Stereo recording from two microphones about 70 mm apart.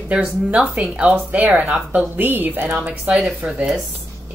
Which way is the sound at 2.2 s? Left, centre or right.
Right.